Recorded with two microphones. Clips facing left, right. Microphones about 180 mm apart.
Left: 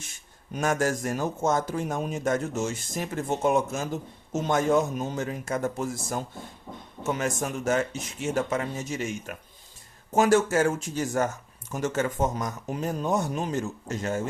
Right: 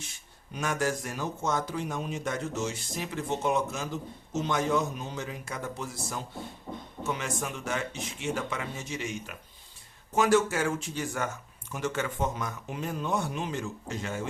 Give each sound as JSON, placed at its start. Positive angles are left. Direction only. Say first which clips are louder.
{"t": 0.5, "sound": "a man's voice", "louder": "left 4 dB", "side_deg": 45}